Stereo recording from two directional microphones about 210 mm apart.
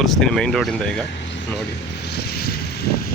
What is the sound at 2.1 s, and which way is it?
Vehicle, 50° left (ahead or behind).